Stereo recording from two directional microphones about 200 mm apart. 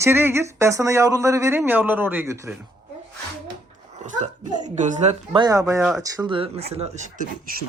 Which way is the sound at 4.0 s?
35° right (ahead or behind).